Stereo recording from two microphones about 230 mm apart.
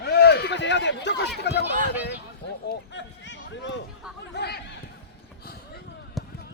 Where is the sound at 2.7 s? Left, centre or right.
Left.